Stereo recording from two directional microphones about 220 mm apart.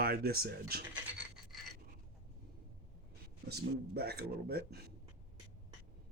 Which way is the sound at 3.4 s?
45° right (ahead or behind).